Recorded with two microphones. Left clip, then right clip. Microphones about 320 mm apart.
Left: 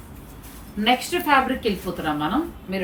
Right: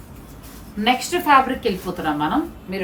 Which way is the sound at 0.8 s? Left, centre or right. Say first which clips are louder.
Right 3 dB; centre.